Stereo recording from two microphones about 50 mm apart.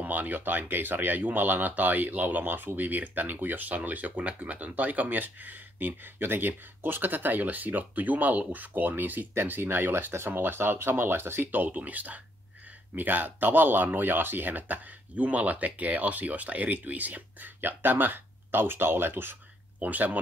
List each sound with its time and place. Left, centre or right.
0.0 s speech: right
9.3 s speech: right
19.8 s speech: right